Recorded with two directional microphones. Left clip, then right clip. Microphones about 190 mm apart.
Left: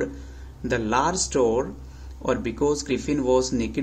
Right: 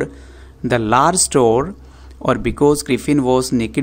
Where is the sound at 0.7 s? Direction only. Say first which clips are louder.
Right 9 dB; 40° right (ahead or behind).